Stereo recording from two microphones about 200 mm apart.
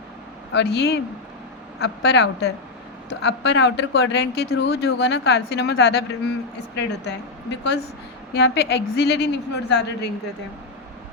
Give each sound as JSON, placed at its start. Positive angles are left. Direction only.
{"t": 0.5, "sound": "speech", "side_deg": 55}